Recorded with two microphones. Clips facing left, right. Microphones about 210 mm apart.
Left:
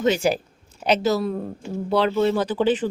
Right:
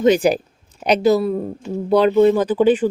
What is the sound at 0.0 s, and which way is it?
Speech, 15° right (ahead or behind).